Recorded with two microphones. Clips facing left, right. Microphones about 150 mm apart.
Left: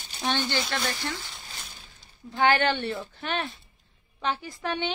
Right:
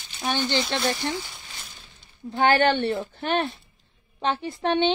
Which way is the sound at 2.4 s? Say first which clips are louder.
Right 3 dB; 35° right (ahead or behind).